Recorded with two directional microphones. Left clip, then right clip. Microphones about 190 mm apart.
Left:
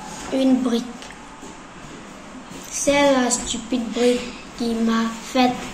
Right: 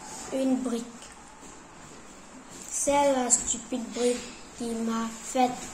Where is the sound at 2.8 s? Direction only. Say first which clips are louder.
Left 7 dB; 10° right (ahead or behind).